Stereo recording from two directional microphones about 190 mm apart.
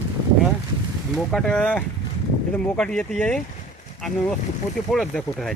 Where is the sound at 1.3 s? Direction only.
Centre (ahead or behind).